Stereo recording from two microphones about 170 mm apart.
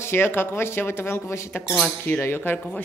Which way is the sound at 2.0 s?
15° left (ahead or behind).